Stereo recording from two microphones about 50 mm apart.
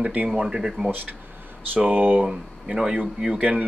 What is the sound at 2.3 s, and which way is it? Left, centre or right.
A man's voice, centre.